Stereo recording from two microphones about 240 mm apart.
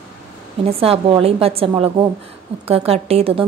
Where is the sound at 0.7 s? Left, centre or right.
Right.